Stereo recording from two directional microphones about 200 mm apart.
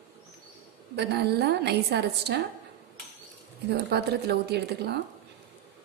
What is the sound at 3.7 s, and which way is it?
Speech, 55° right (ahead or behind).